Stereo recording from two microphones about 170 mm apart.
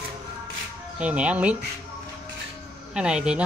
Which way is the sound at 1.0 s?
10° right (ahead or behind).